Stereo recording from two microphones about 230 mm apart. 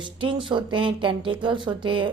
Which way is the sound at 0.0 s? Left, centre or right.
Right.